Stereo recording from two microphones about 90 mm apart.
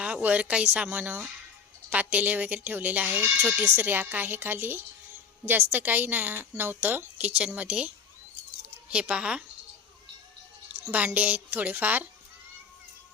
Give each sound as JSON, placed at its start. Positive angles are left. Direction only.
{"t": 0.0, "sound": "a woman's voice", "side_deg": -15}
{"t": 8.9, "sound": "speech", "side_deg": -10}
{"t": 10.9, "sound": "a woman's voice", "side_deg": -15}